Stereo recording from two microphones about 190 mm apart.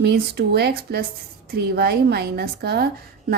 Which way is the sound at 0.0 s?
60° right (ahead or behind).